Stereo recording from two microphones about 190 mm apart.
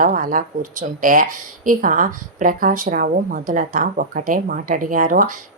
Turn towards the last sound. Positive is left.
turn(degrees=-45)  # may be behind; listen again after turning